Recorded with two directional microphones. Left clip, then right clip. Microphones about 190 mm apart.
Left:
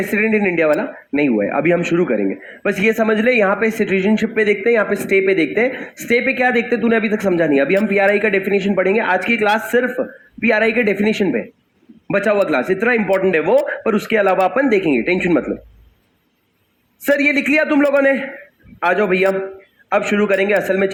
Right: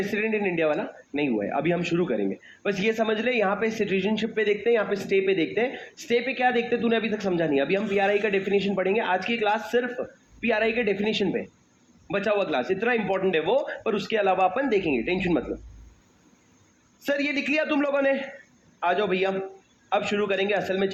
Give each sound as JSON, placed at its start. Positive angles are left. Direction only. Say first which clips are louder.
{"t": 0.1, "sound": "a man's voice", "louder": "left 9 dB", "side_deg": 35}
{"t": 3.0, "sound": "a man's voice", "louder": "left 11 dB", "side_deg": 40}
{"t": 3.4, "sound": "speech", "louder": "left 9 dB", "side_deg": 45}
{"t": 3.7, "sound": "a man's voice", "louder": "left 9 dB", "side_deg": 30}
{"t": 17.2, "sound": "a man's voice", "louder": "left 9 dB", "side_deg": 30}